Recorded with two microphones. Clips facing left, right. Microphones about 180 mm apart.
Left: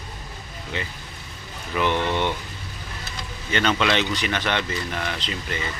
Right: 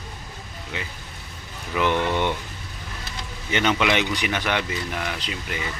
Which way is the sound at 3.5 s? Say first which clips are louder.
Even; 15° right (ahead or behind).